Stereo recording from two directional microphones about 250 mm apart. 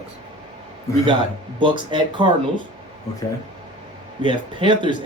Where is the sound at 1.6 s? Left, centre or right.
Centre.